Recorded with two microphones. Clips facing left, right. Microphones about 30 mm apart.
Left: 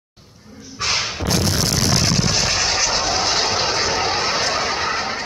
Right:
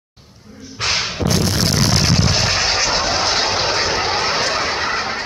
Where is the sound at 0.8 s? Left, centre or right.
Centre.